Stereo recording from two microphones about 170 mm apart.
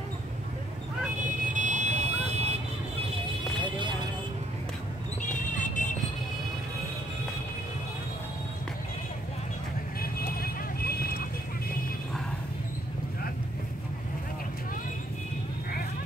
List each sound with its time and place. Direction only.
1.2 s vehicle: 45° right (ahead or behind)
5.6 s vehicle: 45° left (ahead or behind)
10.2 s vehicle: 65° left (ahead or behind)